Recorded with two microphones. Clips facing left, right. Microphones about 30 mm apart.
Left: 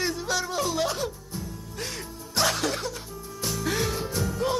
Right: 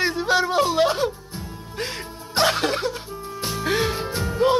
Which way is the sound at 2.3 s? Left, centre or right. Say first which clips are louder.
Right 5 dB; right.